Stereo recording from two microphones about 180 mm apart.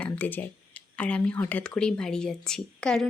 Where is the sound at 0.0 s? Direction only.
10° left (ahead or behind).